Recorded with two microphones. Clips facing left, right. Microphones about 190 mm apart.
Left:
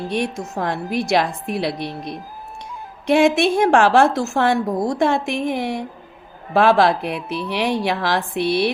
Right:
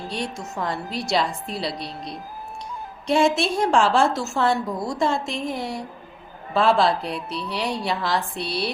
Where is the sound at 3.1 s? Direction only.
60° left (ahead or behind).